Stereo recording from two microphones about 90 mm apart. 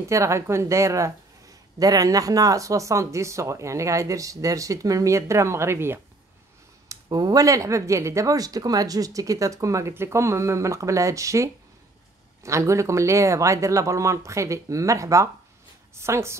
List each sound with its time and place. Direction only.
0.0 s speech: 35° right (ahead or behind)
6.9 s speech: 45° right (ahead or behind); by 16.3 s 30° right (ahead or behind)